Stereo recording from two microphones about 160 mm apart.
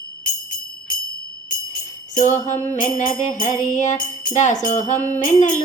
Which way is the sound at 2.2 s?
50° left (ahead or behind).